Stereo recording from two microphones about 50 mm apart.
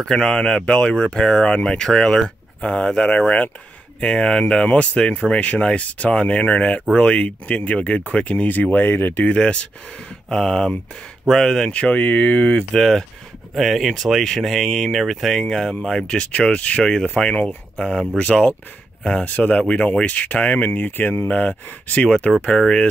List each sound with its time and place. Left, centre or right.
0.0 s speech: centre; by 9.3 s left
9.3 s speech: left
10.3 s speech: centre
11.7 s speech: left
12.7 s speech: centre
16.1 s speech: left
16.8 s speech: centre
18.1 s speech: left